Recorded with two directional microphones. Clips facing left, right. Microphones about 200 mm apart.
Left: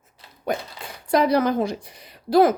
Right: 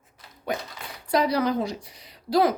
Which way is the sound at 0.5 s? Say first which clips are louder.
Left 3 dB; 45° left (ahead or behind).